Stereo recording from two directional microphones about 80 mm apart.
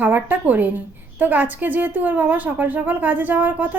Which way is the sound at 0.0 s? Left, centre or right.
Right.